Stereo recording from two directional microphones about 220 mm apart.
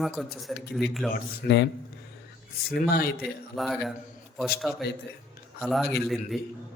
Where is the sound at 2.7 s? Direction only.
45° left (ahead or behind).